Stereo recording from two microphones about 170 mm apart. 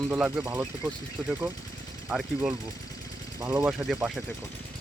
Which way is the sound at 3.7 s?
5° right (ahead or behind).